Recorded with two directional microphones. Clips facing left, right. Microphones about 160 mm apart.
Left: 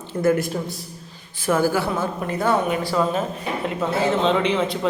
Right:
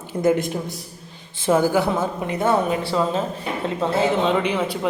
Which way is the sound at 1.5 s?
20° right (ahead or behind).